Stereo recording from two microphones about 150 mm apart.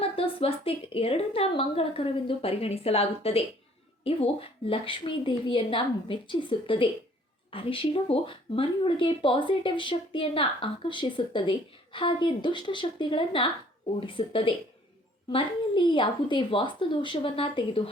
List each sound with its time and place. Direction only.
0.0 s speech: 40° left (ahead or behind)